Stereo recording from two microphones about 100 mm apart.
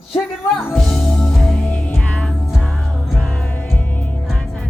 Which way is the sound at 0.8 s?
5° left (ahead or behind).